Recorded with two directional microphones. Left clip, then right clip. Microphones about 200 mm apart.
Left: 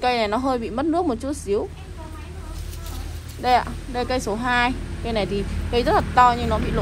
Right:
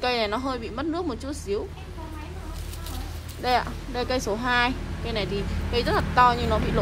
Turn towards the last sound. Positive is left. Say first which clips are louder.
# left 2 dB
turn(degrees=-20)  # may be behind; listen again after turning